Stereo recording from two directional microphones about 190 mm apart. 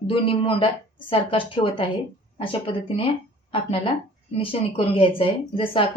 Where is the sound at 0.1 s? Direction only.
30° left (ahead or behind).